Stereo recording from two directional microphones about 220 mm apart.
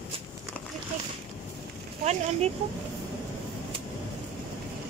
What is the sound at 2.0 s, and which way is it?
Speech, 30° right (ahead or behind).